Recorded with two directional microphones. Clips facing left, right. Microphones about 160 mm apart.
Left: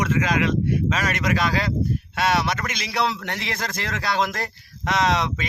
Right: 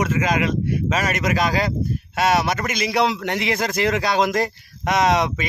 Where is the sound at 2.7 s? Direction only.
10° right (ahead or behind).